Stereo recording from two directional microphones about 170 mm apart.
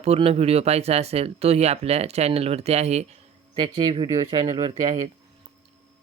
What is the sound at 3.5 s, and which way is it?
Speech, 25° right (ahead or behind).